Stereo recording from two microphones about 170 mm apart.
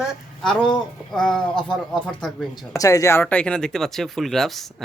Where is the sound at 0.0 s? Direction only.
5° left (ahead or behind).